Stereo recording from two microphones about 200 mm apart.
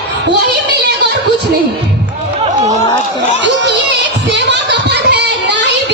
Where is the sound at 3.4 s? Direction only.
60° right (ahead or behind).